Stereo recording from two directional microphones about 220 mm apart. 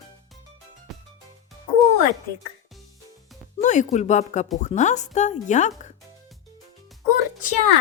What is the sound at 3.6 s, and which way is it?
Speech, 35° left (ahead or behind).